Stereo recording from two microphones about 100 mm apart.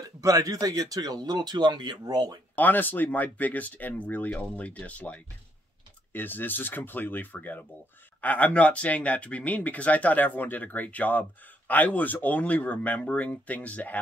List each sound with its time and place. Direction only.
0.2 s speech: 35° right (ahead or behind)
2.5 s speech: 20° left (ahead or behind)